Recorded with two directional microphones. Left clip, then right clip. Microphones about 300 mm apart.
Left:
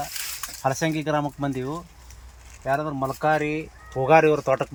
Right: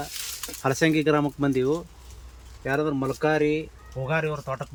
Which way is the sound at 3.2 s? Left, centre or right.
Centre.